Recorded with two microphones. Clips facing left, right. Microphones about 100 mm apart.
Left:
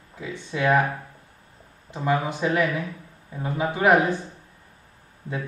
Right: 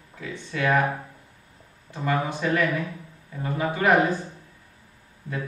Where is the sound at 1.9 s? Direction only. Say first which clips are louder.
Left 2 dB; 20° left (ahead or behind).